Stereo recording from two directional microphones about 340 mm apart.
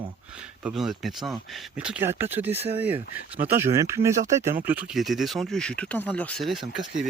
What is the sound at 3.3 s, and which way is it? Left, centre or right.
Speech, centre.